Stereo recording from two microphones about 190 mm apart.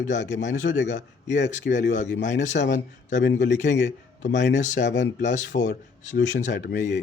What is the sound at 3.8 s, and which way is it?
Speech, 70° left (ahead or behind).